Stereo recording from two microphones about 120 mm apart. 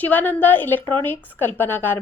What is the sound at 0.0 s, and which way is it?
A woman's voice, 15° left (ahead or behind).